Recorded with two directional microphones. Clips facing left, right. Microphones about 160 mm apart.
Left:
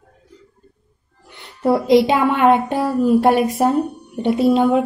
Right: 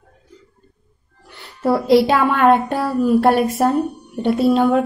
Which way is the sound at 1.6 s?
20° left (ahead or behind).